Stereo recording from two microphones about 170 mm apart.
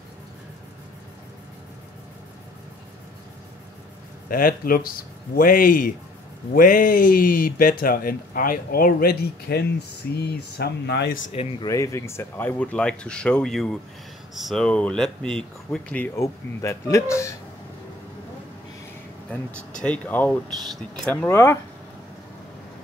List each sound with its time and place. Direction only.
4.3 s speech: 55° left (ahead or behind); by 11.1 s 80° left
11.6 s speech: 20° left (ahead or behind)
19.3 s speech: 10° left (ahead or behind)